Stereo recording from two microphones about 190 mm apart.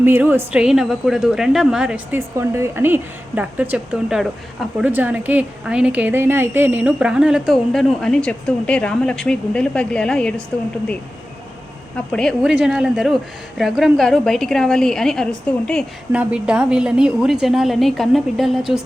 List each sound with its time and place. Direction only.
0.0 s a woman's voice: 10° right (ahead or behind); by 10.4 s 5° left (ahead or behind)
12.1 s a woman's voice: 5° left (ahead or behind)